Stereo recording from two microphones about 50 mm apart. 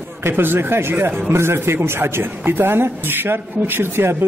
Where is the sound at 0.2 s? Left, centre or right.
Right.